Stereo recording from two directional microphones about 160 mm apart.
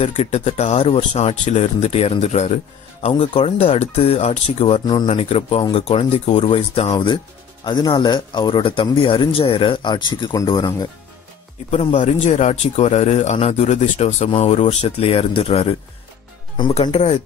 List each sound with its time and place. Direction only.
0.0 s speech: 40° left (ahead or behind)
11.7 s speech: 45° left (ahead or behind)
16.9 s speech: 45° left (ahead or behind)